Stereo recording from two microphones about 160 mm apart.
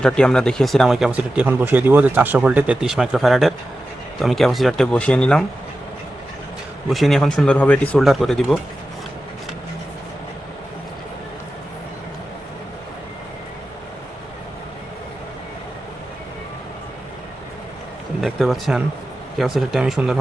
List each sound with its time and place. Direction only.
0.0 s speech: 5° left (ahead or behind)
6.9 s speech: centre (ahead or behind)
18.2 s speech: centre (ahead or behind)